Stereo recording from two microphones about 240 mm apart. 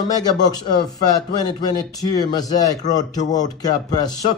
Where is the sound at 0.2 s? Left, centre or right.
Centre.